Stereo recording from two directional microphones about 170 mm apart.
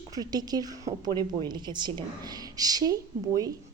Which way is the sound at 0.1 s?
25° right (ahead or behind).